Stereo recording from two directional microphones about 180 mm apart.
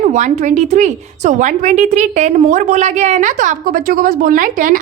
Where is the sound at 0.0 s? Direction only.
40° right (ahead or behind).